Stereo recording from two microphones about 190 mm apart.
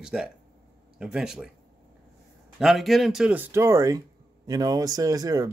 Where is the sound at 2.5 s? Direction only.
Centre (ahead or behind).